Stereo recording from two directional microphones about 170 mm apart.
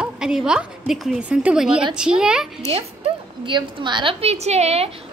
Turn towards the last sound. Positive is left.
turn(degrees=-40)  # may be behind; listen again after turning